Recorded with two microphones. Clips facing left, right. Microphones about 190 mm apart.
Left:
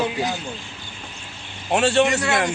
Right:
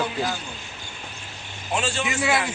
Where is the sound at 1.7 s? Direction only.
65° left (ahead or behind).